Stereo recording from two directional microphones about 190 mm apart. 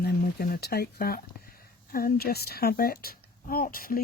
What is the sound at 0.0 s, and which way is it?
Speech, 55° left (ahead or behind).